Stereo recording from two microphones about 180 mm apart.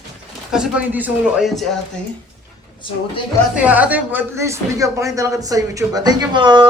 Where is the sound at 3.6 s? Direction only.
10° right (ahead or behind).